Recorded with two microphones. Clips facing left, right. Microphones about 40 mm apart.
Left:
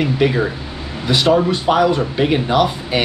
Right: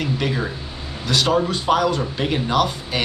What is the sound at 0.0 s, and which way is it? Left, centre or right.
Speech, centre.